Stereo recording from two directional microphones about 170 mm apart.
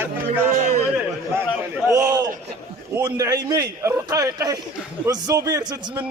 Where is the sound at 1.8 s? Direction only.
20° right (ahead or behind).